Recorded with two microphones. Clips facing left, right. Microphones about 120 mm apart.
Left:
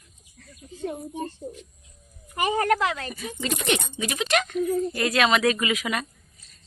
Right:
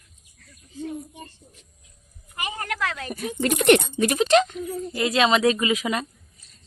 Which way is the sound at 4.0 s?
40° right (ahead or behind).